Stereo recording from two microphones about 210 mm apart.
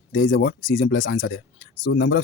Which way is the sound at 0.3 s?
60° left (ahead or behind).